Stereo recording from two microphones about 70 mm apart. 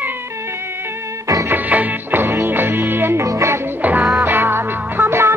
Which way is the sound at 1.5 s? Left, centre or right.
Right.